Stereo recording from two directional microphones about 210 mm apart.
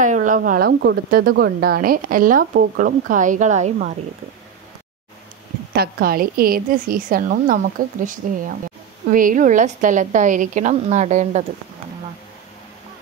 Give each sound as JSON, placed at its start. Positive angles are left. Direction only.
{"t": 0.0, "sound": "a woman's voice", "side_deg": -40}
{"t": 5.8, "sound": "a woman's voice", "side_deg": -45}